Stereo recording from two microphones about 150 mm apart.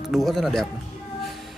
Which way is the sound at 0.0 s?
Centre (ahead or behind).